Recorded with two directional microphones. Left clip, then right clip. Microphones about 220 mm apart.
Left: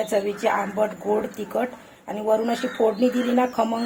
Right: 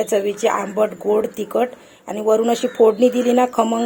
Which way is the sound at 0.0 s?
45° right (ahead or behind).